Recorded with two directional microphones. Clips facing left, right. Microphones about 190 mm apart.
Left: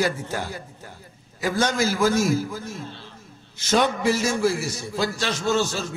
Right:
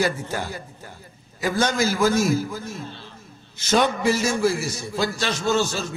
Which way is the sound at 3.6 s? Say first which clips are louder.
Right 1 dB; 15° right (ahead or behind).